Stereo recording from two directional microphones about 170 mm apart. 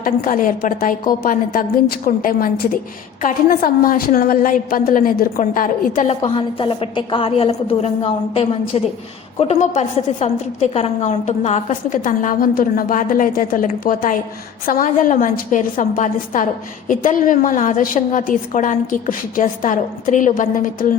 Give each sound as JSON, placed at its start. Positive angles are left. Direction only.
{"t": 0.0, "sound": "a woman's voice", "side_deg": 55}
{"t": 6.1, "sound": "a woman's voice", "side_deg": 35}
{"t": 9.4, "sound": "a woman's voice", "side_deg": 45}